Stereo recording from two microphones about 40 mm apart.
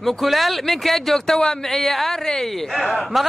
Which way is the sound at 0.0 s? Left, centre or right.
Centre.